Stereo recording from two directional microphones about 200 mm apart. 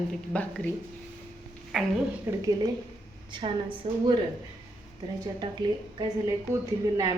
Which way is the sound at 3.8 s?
25° right (ahead or behind).